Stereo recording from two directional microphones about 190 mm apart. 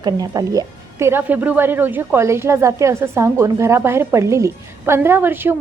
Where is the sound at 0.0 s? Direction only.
20° right (ahead or behind).